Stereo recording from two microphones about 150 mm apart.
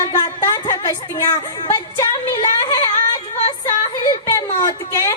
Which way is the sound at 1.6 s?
30° left (ahead or behind).